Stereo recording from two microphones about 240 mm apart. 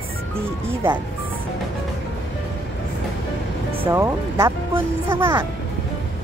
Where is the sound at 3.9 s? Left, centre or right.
Centre.